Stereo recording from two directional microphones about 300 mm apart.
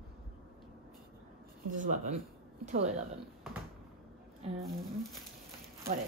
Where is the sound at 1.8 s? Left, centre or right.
Right.